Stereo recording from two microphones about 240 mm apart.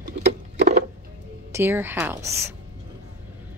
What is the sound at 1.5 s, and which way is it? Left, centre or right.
Speech, centre.